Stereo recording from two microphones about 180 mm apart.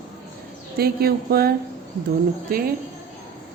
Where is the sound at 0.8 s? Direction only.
60° right (ahead or behind).